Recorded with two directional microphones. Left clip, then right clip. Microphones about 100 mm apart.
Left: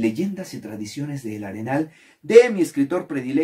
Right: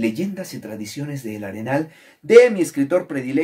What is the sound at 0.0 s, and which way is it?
Speech, 15° right (ahead or behind).